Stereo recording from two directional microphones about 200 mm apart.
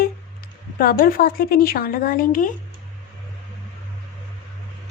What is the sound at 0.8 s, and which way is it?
Speech, 45° left (ahead or behind).